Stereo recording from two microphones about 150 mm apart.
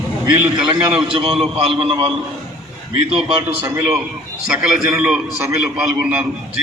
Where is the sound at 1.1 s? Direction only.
40° right (ahead or behind).